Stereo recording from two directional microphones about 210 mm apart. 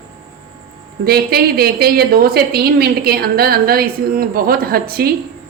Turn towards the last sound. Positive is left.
turn(degrees=-45)  # may be behind; listen again after turning